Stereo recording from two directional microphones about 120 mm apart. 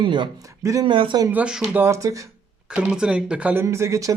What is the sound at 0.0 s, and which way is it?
Speech, 40° right (ahead or behind).